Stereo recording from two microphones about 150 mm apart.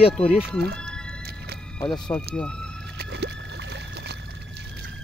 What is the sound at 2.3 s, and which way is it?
Speech, 5° left (ahead or behind).